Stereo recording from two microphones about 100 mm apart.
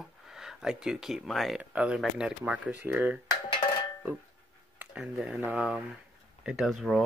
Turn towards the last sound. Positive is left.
turn(degrees=0)  # may be behind; listen again after turning